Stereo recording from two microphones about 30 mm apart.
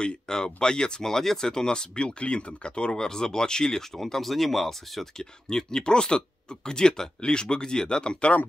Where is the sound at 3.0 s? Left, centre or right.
Left.